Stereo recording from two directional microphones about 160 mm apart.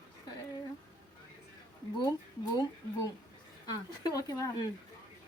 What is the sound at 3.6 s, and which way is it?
Speech, 25° left (ahead or behind).